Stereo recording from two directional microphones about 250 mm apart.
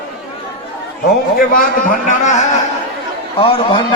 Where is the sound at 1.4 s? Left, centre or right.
Left.